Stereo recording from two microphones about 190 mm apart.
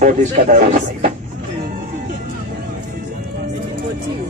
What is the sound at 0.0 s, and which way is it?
Speech, 40° right (ahead or behind).